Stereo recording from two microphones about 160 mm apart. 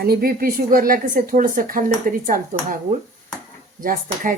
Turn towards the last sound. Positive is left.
turn(degrees=-60)  # may be behind; listen again after turning